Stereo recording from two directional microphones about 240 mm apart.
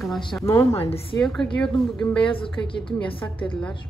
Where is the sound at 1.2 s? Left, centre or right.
Centre.